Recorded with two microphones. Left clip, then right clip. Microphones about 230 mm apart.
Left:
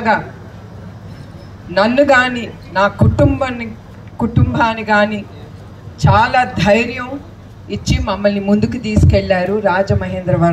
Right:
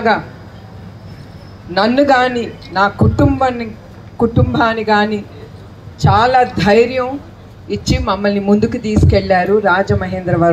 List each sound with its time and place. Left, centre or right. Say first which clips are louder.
1.7 s a woman's voice: even; centre